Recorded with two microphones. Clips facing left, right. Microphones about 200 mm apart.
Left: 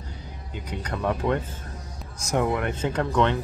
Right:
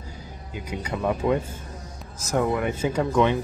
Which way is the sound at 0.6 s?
10° right (ahead or behind).